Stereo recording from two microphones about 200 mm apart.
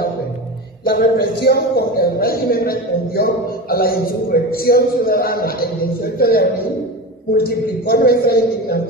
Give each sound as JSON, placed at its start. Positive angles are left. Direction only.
{"t": 0.8, "sound": "speech", "side_deg": 50}